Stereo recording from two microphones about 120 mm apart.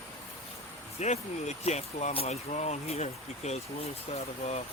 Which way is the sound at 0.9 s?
65° left (ahead or behind).